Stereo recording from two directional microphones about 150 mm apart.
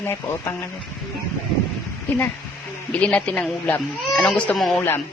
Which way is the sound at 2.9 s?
10° left (ahead or behind).